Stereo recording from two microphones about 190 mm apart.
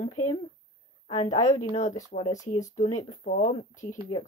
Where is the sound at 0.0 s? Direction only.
35° left (ahead or behind).